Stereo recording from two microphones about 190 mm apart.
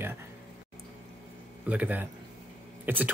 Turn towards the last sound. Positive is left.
turn(degrees=-10)  # may be behind; listen again after turning